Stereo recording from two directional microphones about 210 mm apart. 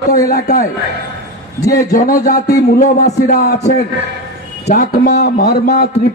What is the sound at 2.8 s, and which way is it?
Speech, 35° left (ahead or behind).